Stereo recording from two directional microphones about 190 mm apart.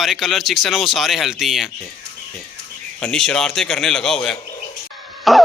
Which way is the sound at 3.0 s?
5° left (ahead or behind).